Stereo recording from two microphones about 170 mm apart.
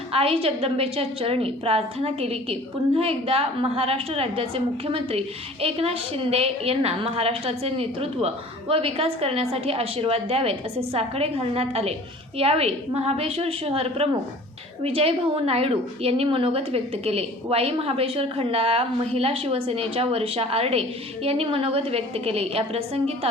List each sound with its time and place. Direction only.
0.1 s a woman's voice: 35° right (ahead or behind)